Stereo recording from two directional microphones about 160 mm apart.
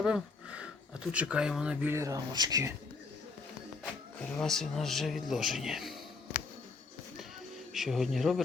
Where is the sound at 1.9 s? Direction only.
20° right (ahead or behind).